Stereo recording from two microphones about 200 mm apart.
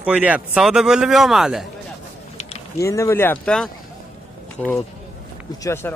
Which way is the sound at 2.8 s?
15° left (ahead or behind).